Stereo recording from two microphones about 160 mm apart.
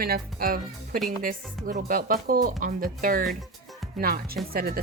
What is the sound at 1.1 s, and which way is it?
Speech, 50° right (ahead or behind).